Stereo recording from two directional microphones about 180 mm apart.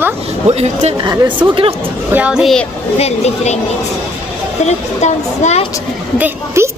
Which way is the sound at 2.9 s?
35° left (ahead or behind).